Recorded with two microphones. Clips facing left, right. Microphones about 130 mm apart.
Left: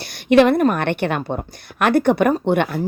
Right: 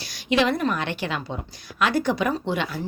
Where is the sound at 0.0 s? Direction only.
55° left (ahead or behind).